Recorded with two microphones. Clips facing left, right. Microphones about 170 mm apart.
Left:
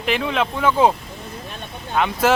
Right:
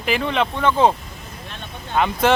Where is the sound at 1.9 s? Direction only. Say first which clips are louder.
Even; centre (ahead or behind).